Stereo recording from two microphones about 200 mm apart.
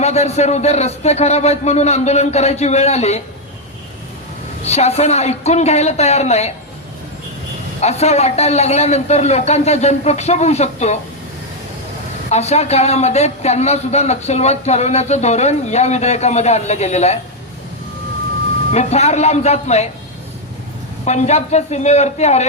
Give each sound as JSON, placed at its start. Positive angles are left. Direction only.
{"t": 0.0, "sound": "a man's voice", "side_deg": 35}
{"t": 4.6, "sound": "a man's voice", "side_deg": 30}
{"t": 7.8, "sound": "a man's voice", "side_deg": 35}
{"t": 12.3, "sound": "a man's voice", "side_deg": 30}
{"t": 18.7, "sound": "a man's voice", "side_deg": 35}
{"t": 21.0, "sound": "a man's voice", "side_deg": 35}